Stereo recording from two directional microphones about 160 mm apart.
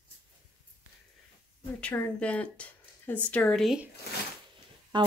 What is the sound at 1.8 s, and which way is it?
Speech, 10° left (ahead or behind).